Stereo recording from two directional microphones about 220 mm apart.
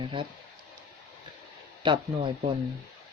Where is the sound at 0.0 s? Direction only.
20° right (ahead or behind).